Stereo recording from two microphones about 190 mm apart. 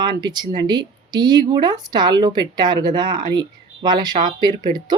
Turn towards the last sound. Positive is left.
turn(degrees=-20)  # may be behind; listen again after turning